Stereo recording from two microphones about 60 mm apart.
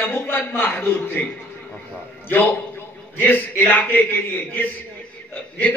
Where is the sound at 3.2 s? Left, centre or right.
Left.